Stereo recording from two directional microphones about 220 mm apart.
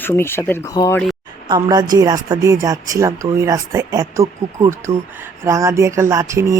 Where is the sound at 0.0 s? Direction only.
10° left (ahead or behind).